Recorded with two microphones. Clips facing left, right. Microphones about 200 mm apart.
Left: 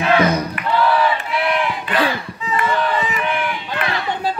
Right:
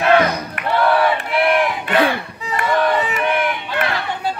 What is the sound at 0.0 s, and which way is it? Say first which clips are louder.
Battle cry: right 1 dB; 50° right (ahead or behind).